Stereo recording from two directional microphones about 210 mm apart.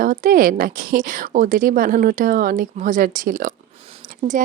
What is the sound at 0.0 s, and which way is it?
Speech, 40° right (ahead or behind).